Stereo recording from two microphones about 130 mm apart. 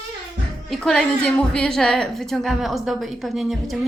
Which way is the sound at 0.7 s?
5° left (ahead or behind).